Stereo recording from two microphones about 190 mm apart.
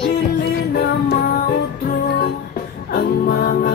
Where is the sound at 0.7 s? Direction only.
55° left (ahead or behind).